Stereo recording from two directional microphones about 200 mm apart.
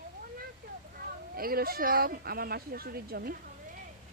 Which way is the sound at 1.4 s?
50° right (ahead or behind).